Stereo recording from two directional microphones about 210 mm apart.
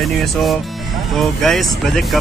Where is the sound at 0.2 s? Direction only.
Centre (ahead or behind).